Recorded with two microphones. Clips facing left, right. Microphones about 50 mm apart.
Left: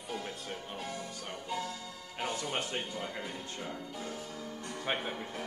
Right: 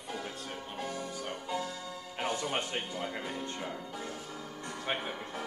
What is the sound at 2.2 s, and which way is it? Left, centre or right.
Speech, centre.